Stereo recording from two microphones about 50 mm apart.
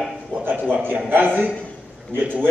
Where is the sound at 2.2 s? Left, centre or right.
Right.